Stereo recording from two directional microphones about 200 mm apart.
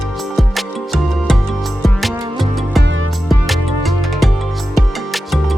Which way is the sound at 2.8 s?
65° right (ahead or behind).